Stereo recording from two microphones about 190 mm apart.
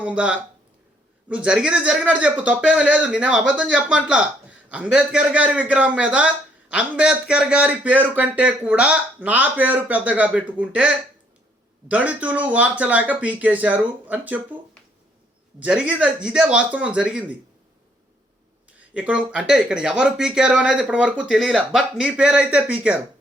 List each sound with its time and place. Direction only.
0.0 s a man's voice: 5° right (ahead or behind)
15.6 s speech: 5° right (ahead or behind)
18.8 s speech: 5° right (ahead or behind)